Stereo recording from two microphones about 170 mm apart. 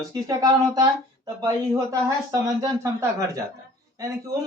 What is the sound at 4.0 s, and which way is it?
Speech, 20° right (ahead or behind).